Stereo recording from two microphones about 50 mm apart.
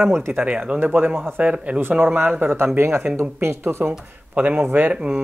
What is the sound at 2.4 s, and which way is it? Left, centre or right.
Speech, right.